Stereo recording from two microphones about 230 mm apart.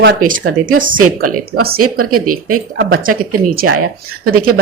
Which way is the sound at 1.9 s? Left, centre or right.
Right.